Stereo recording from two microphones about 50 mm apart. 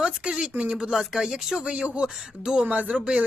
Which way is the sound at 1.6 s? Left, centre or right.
Right.